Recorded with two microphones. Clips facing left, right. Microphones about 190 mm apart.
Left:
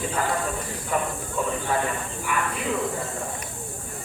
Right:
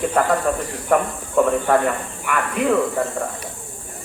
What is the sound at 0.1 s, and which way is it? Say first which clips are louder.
Speech: right 8 dB; 60° right (ahead or behind).